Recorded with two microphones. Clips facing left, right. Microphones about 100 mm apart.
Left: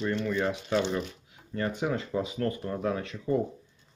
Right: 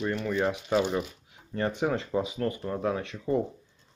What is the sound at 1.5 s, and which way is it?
Speech, 30° right (ahead or behind).